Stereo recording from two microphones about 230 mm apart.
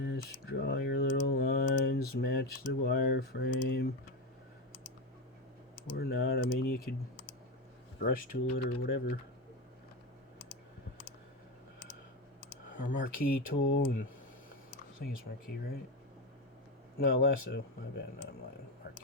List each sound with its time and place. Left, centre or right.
0.0 s a sound: left
1.6 s speech: left
5.7 s speech: left
12.7 s speech: left
15.0 s speech: left
17.0 s speech: left